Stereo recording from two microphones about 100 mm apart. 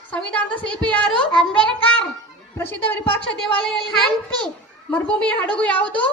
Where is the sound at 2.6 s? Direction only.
20° left (ahead or behind).